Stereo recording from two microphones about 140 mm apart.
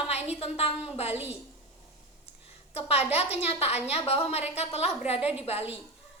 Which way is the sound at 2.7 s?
45° left (ahead or behind).